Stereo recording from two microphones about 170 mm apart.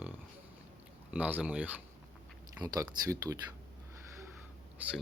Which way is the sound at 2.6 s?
20° right (ahead or behind).